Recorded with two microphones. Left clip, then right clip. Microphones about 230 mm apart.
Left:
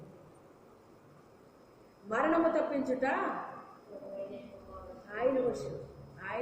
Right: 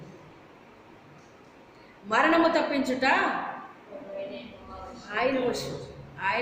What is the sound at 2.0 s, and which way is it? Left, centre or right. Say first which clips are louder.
A woman's voice: right 7 dB; centre.